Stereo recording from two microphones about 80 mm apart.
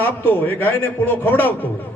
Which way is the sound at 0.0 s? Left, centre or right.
Left.